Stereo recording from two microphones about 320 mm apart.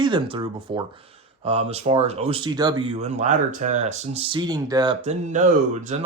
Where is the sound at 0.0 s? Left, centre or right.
Centre.